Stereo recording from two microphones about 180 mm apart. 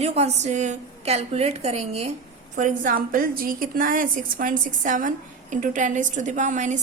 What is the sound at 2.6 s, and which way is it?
A woman's voice, 45° right (ahead or behind).